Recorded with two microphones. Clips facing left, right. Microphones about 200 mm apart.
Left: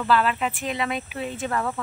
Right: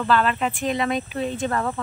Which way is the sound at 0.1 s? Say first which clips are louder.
Right 1 dB; 5° left (ahead or behind).